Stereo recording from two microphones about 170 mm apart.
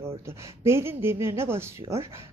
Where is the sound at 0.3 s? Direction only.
15° right (ahead or behind).